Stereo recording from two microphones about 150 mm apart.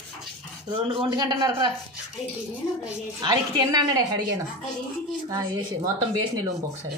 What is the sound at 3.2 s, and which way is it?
A child's voice, 30° right (ahead or behind).